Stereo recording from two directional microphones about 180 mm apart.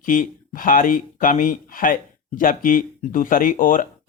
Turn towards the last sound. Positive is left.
turn(degrees=45)  # may be behind; listen again after turning